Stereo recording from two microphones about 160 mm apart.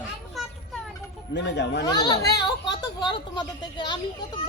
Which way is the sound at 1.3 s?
90° left.